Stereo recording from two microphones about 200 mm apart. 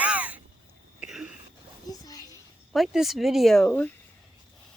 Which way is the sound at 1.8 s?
20° left (ahead or behind).